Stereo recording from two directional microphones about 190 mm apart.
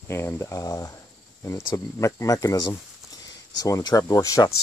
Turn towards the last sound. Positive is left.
turn(degrees=15)  # may be behind; listen again after turning